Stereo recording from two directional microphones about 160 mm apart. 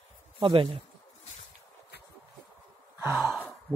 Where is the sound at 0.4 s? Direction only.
35° right (ahead or behind).